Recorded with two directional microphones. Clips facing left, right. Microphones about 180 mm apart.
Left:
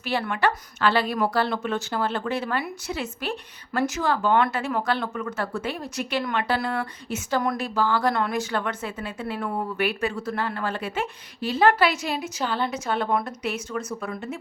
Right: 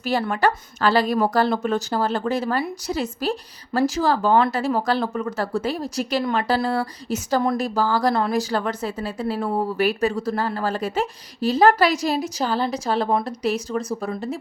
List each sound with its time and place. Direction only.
0.0 s speech: 40° right (ahead or behind)